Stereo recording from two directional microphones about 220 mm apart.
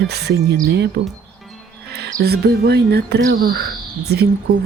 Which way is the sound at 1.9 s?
50° right (ahead or behind).